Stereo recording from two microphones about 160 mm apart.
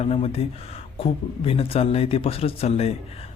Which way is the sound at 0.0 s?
40° left (ahead or behind).